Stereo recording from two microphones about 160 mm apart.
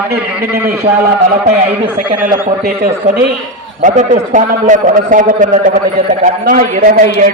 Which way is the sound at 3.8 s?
50° right (ahead or behind).